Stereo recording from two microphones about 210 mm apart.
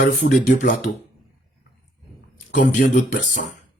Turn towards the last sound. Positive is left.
turn(degrees=40)  # may be behind; listen again after turning